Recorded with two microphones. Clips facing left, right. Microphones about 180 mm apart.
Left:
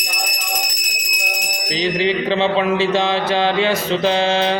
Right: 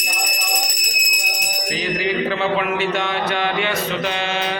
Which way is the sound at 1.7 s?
25° left (ahead or behind).